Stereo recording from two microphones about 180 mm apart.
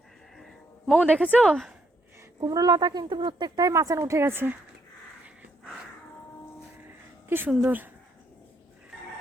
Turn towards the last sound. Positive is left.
turn(degrees=-10)  # may be behind; listen again after turning